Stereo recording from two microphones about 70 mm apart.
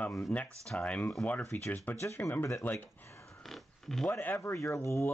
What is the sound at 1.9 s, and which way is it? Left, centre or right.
Speech, left.